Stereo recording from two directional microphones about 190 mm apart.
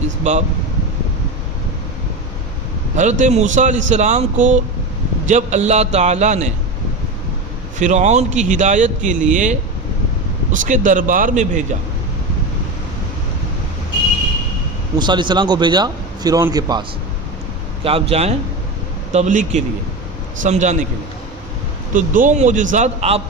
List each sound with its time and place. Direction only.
0.3 s a man's voice: 40° right (ahead or behind)
2.9 s a man's voice: 40° right (ahead or behind)
7.8 s a man's voice: 40° right (ahead or behind)
14.9 s a man's voice: 25° right (ahead or behind)
17.8 s a man's voice: 30° right (ahead or behind)
21.9 s a man's voice: 45° right (ahead or behind)